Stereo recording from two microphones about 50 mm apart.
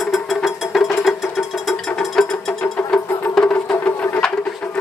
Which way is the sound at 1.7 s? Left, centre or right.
Centre.